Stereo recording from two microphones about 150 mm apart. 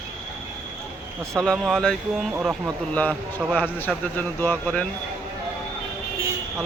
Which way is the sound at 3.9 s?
10° left (ahead or behind).